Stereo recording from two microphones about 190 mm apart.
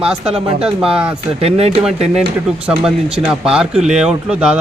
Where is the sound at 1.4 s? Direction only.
30° right (ahead or behind).